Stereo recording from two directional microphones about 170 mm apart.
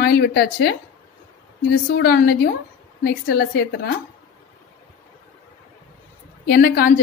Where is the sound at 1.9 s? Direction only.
70° left (ahead or behind).